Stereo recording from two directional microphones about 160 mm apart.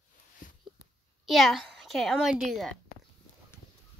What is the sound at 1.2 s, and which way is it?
A woman's voice, centre (ahead or behind).